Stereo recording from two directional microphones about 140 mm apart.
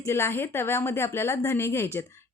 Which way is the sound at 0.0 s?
20° left (ahead or behind).